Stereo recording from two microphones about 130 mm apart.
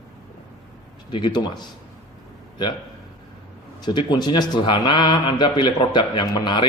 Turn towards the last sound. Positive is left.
turn(degrees=35)  # may be behind; listen again after turning